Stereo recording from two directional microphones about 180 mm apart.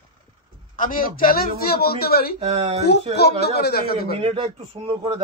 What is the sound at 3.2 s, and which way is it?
A man's voice, 65° left (ahead or behind).